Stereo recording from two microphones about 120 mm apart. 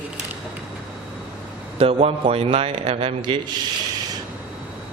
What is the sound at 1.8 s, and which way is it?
A man's voice, 55° right (ahead or behind).